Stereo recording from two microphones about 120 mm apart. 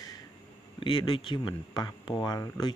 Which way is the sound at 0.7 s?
45° left (ahead or behind).